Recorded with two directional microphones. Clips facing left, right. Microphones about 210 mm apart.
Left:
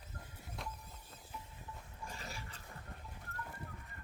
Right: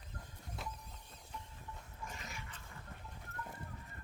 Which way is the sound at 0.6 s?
Centre (ahead or behind).